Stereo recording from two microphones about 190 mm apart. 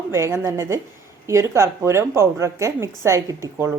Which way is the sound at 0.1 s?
15° right (ahead or behind).